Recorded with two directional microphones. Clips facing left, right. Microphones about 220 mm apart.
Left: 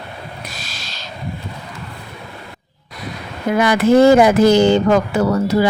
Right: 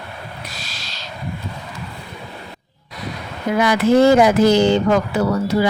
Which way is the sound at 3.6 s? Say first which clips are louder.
Left 2 dB; 50° left (ahead or behind).